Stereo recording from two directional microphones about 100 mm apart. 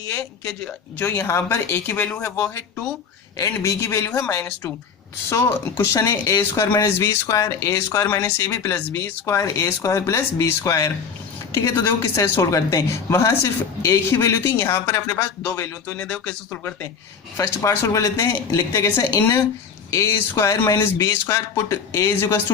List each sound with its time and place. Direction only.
0.2 s speech: 5° left (ahead or behind)
1.2 s a woman's voice: 20° left (ahead or behind)
5.3 s a woman's voice: 25° left (ahead or behind)
16.0 s speech: 10° left (ahead or behind)
17.3 s a woman's voice: 30° left (ahead or behind)